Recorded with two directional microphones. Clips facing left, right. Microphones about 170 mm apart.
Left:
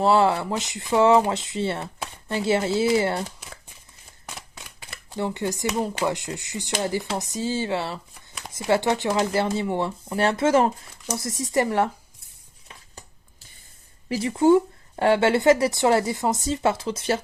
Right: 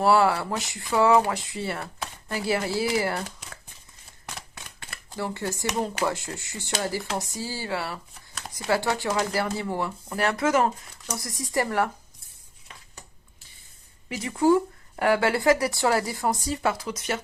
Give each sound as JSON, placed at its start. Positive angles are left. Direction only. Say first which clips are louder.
{"t": 0.0, "sound": "speech", "louder": "left 1 dB", "side_deg": 20}
{"t": 5.1, "sound": "speech", "louder": "left 4 dB", "side_deg": 20}
{"t": 14.1, "sound": "speech", "louder": "left 3 dB", "side_deg": 30}